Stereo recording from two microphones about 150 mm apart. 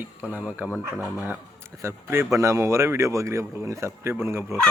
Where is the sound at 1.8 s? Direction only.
20° right (ahead or behind).